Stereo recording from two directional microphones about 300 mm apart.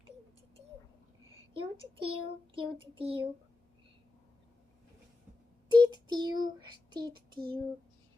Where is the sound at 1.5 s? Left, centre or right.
Centre.